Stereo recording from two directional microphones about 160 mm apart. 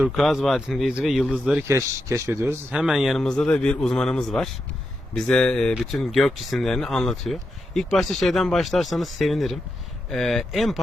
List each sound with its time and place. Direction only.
0.0 s speech: centre (ahead or behind)
1.6 s speech: 20° right (ahead or behind)
2.7 s speech: centre (ahead or behind)